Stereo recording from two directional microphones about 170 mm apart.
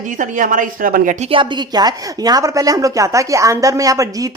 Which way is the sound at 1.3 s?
25° right (ahead or behind).